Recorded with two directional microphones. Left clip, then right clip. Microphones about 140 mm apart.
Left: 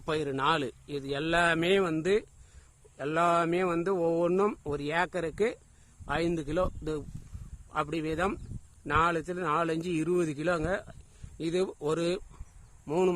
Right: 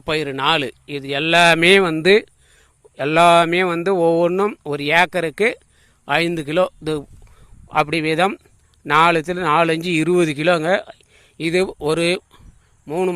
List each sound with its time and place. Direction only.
0.0 s a man's voice: 20° right (ahead or behind)
1.5 s a man's voice: 40° right (ahead or behind)
4.3 s speech: 15° right (ahead or behind)
4.7 s a man's voice: 30° right (ahead or behind)
12.8 s speech: 5° right (ahead or behind)